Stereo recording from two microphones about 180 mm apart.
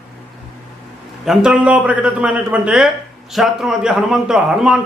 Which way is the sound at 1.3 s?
5° right (ahead or behind).